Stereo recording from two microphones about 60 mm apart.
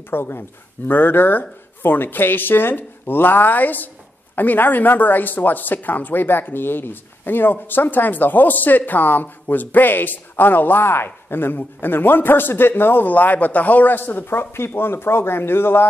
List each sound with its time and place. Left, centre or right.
0.1 s speech: left